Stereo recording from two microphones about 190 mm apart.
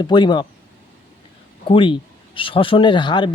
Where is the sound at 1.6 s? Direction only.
25° left (ahead or behind).